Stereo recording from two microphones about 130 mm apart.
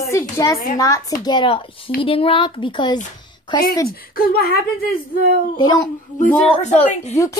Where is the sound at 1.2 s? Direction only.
35° left (ahead or behind).